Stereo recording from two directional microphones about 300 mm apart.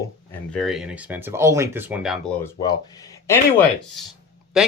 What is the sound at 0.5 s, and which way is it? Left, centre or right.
Speech, centre.